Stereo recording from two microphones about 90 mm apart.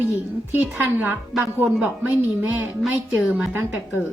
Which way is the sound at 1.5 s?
20° right (ahead or behind).